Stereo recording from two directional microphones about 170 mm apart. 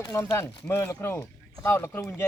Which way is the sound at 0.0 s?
15° left (ahead or behind).